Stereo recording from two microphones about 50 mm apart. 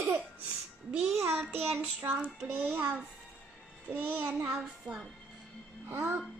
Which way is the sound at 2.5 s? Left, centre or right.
Right.